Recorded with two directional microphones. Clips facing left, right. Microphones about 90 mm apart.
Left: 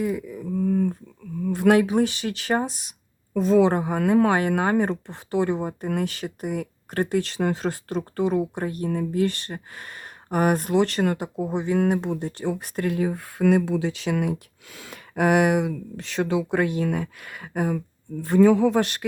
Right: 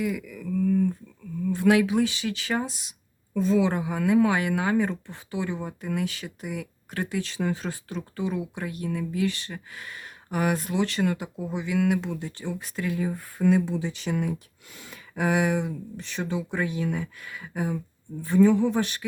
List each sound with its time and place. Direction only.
0.0 s a sound: 35° left (ahead or behind); by 1.8 s 50° left (ahead or behind)
1.8 s speech: 40° left (ahead or behind)
3.3 s speech: 65° left (ahead or behind); by 12.3 s 45° left (ahead or behind)
12.4 s speech: 60° left (ahead or behind)
18.2 s speech: 80° left